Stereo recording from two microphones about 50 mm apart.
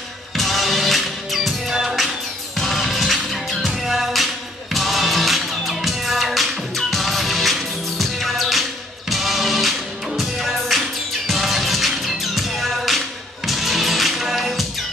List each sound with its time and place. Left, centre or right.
0.4 s music: centre